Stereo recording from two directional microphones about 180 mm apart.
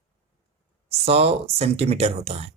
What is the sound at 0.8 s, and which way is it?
Speech, 35° right (ahead or behind).